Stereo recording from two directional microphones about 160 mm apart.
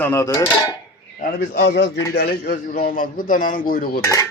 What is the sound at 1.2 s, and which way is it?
Speech, 80° left.